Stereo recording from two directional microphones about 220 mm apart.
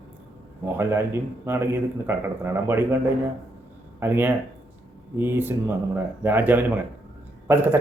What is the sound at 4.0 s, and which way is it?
Speech, 10° right (ahead or behind).